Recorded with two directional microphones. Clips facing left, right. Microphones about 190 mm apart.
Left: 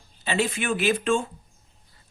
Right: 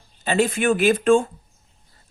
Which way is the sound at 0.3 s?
45° right (ahead or behind).